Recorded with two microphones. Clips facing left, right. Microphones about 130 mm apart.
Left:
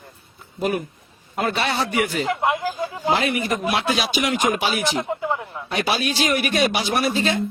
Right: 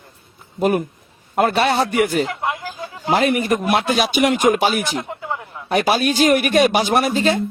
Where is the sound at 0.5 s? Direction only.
45° right (ahead or behind).